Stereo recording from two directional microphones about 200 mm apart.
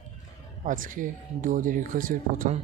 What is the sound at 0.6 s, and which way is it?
Speech, 40° right (ahead or behind).